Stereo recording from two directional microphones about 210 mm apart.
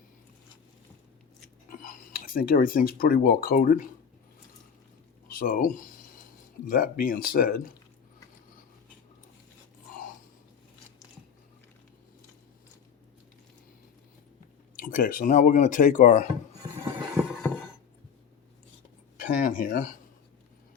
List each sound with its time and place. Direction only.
1.8 s speech: 40° left (ahead or behind)
5.3 s speech: 45° left (ahead or behind)
14.8 s speech: 40° left (ahead or behind)
17.2 s a sound: 10° right (ahead or behind)
19.1 s speech: 40° left (ahead or behind)